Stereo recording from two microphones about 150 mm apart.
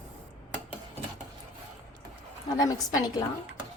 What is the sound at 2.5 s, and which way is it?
Speech, 25° left (ahead or behind).